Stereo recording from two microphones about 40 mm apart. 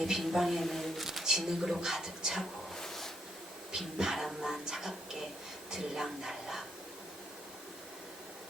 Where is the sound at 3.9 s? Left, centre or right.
Centre.